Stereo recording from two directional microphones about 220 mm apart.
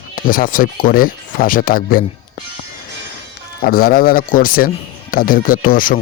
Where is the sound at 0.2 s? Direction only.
40° left (ahead or behind).